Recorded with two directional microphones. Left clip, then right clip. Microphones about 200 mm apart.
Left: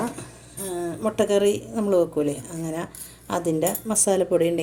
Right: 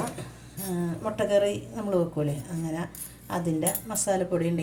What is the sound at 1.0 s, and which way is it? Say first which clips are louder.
A woman's voice: left 4 dB; 55° left (ahead or behind).